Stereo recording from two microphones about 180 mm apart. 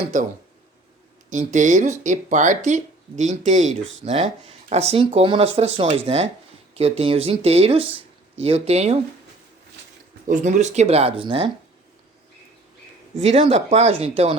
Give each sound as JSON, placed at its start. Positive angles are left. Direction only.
{"t": 1.3, "sound": "speech", "side_deg": -45}
{"t": 10.2, "sound": "speech", "side_deg": -40}
{"t": 13.2, "sound": "speech", "side_deg": -35}